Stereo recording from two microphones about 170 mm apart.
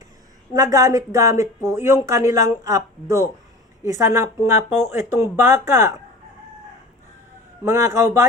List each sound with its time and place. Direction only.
0.5 s speech: 20° right (ahead or behind)
7.6 s speech: 15° right (ahead or behind)